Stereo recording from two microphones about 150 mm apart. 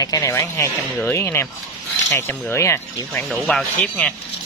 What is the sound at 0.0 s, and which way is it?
Speech, 20° left (ahead or behind).